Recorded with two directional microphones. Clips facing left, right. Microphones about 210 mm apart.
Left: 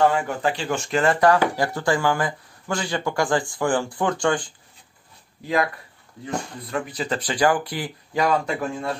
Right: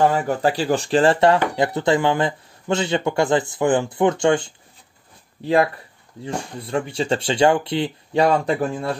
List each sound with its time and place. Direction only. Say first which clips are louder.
0.1 s speech: right 4 dB; 35° right (ahead or behind)